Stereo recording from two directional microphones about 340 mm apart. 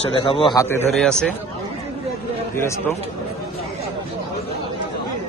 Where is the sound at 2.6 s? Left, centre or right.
Centre.